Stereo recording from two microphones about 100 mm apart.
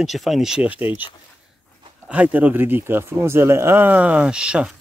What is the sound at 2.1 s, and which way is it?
Speech, 15° right (ahead or behind).